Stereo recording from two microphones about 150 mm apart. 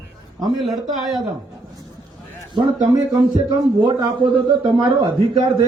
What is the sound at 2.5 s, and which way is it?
A man's voice, 30° right (ahead or behind).